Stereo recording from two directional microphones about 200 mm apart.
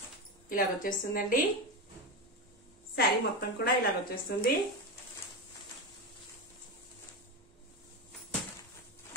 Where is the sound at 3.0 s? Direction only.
50° left (ahead or behind).